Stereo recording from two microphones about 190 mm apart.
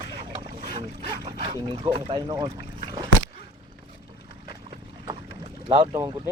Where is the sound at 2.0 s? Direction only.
25° right (ahead or behind).